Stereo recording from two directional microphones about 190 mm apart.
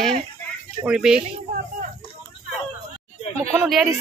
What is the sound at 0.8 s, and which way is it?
Speech, 5° right (ahead or behind).